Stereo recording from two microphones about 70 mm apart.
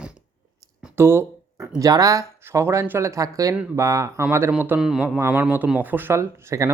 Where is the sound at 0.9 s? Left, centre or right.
Right.